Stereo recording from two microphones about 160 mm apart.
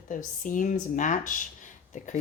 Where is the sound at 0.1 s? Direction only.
55° left (ahead or behind).